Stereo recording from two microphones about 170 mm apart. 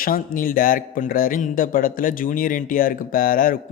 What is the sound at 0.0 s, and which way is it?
A man's voice, 55° left (ahead or behind).